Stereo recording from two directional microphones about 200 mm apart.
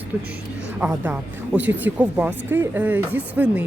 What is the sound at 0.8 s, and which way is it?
Speech, 10° right (ahead or behind).